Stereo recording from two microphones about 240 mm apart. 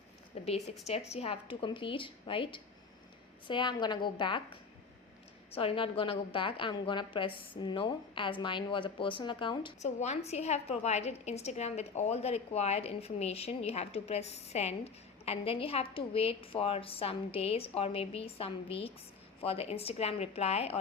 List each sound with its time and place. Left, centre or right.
0.4 s a woman's voice: left
5.5 s a woman's voice: left